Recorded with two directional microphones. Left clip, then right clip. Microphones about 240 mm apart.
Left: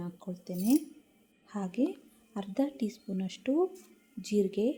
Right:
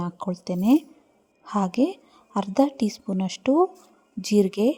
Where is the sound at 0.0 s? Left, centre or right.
Right.